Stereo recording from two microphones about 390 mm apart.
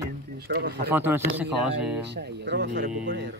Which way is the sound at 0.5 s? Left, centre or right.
Right.